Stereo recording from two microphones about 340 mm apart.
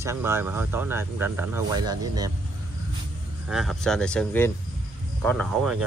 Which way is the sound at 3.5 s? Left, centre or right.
Centre.